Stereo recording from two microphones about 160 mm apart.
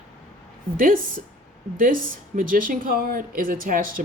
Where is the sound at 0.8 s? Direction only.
60° right (ahead or behind).